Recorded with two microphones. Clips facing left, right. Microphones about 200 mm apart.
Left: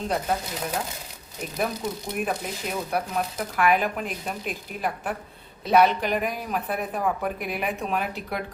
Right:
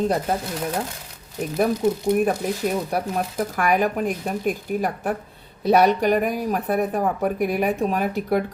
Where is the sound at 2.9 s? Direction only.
45° right (ahead or behind).